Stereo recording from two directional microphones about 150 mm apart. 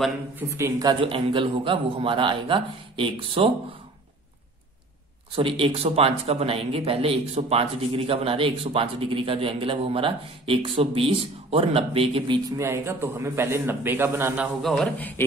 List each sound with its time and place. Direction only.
0.4 s speech: 20° right (ahead or behind)
1.0 s speech: 35° right (ahead or behind)
5.3 s speech: 35° right (ahead or behind)
12.5 s a man's voice: 20° right (ahead or behind)
14.6 s a man's voice: 5° left (ahead or behind)